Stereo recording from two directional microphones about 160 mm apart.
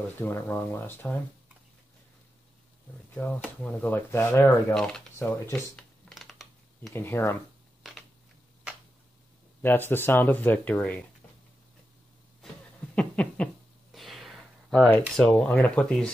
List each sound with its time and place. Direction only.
0.2 s speech: 15° left (ahead or behind)
3.4 s speech: 10° left (ahead or behind)
4.7 s speech: 5° left (ahead or behind)
6.0 s a sound: centre (ahead or behind)
6.9 s speech: 15° left (ahead or behind)
9.6 s speech: 15° left (ahead or behind)
12.9 s a sound: 10° left (ahead or behind)
13.9 s speech: centre (ahead or behind)